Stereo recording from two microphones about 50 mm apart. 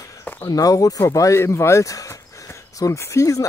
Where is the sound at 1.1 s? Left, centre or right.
Left.